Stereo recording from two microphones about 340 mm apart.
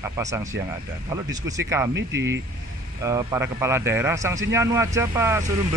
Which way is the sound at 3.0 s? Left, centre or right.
Centre.